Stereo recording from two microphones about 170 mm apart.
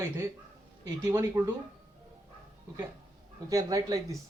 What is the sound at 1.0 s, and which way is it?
Speech, 15° right (ahead or behind).